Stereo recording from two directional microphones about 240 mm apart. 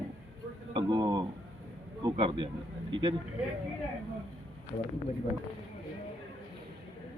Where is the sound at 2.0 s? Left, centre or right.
Right.